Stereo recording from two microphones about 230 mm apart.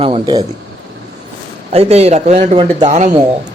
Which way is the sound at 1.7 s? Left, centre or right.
Right.